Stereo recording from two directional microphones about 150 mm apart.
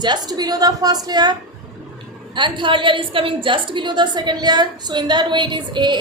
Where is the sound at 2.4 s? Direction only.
30° right (ahead or behind).